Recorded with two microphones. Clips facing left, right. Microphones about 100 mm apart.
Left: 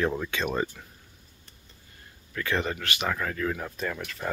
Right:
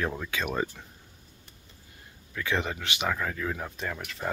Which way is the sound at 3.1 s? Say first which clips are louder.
Left 2 dB; 5° right (ahead or behind).